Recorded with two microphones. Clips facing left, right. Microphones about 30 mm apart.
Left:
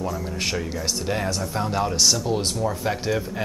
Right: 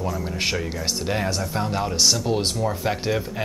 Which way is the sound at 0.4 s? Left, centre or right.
Centre.